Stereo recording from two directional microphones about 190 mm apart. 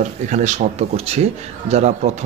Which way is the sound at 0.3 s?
40° right (ahead or behind).